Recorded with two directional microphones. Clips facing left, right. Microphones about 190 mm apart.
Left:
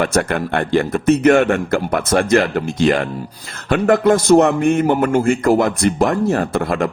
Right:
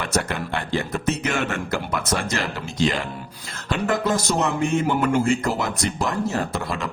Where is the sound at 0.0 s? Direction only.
55° left (ahead or behind).